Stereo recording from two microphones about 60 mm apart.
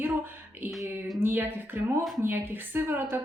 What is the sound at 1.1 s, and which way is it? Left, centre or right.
Speech, right.